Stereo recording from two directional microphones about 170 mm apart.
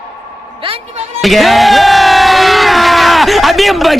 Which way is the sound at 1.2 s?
Centre (ahead or behind).